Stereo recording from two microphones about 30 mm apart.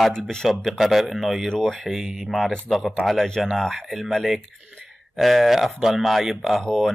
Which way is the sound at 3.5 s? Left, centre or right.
Centre.